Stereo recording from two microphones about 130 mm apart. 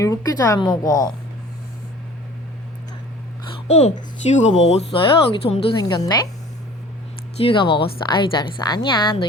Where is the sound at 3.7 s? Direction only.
55° left (ahead or behind).